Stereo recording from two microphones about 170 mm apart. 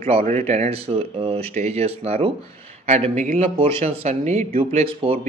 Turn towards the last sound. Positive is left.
turn(degrees=-35)  # may be behind; listen again after turning